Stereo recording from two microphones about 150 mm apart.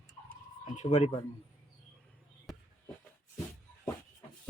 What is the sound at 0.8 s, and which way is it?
Speech, 50° left (ahead or behind).